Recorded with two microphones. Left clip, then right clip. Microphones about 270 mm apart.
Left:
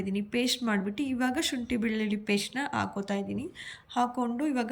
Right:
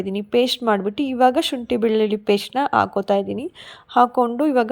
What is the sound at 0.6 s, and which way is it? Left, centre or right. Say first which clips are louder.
Speech: right 11 dB; right.